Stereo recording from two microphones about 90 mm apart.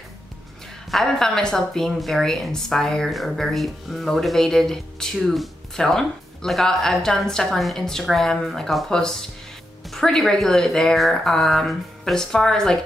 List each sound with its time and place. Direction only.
0.9 s a woman's voice: 5° left (ahead or behind)